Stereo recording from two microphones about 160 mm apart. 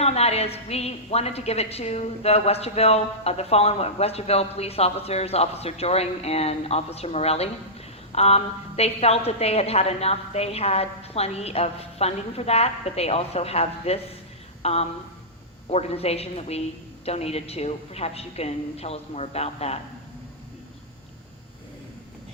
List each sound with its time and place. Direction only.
0.0 s a woman's voice: 40° left (ahead or behind)